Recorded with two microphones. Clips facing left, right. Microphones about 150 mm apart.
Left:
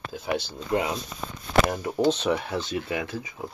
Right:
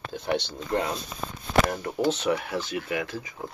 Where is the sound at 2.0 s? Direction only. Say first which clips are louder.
Left 1 dB; 25° left (ahead or behind).